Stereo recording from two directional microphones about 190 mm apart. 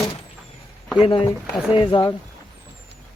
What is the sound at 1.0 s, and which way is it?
Speech, 30° left (ahead or behind).